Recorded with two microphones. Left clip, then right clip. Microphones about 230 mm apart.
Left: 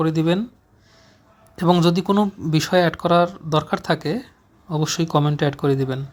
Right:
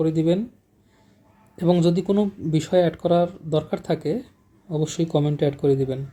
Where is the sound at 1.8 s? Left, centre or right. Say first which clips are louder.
Left 2 dB; left.